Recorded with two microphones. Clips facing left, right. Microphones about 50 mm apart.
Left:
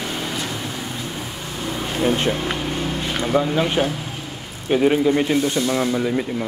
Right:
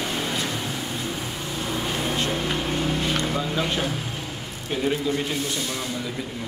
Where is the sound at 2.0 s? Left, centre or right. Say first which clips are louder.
Left 9 dB; left.